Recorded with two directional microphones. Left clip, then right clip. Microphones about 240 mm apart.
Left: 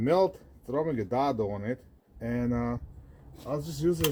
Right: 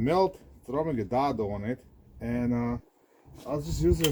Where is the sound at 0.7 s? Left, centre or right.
Right.